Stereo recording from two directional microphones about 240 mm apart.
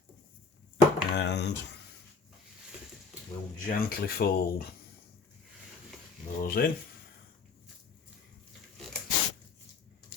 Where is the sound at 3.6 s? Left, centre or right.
Left.